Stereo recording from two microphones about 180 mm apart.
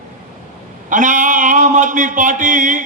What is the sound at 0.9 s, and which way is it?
A man's voice, 45° right (ahead or behind).